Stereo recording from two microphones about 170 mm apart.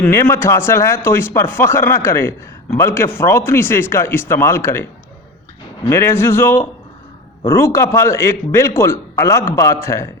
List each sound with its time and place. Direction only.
0.0 s a man's voice: 15° left (ahead or behind)